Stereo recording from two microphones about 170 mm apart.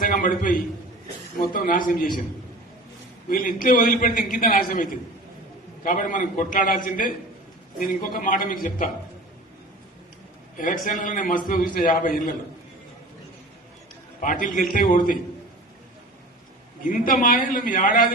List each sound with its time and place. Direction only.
0.0 s a man's voice: 55° left (ahead or behind)
3.2 s a man's voice: 55° left (ahead or behind)
10.6 s a man's voice: 50° left (ahead or behind)
14.2 s a man's voice: 50° left (ahead or behind)
16.8 s a man's voice: 55° left (ahead or behind)